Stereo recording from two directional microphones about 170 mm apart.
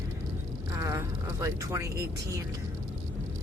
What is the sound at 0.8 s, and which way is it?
Speech, 20° right (ahead or behind).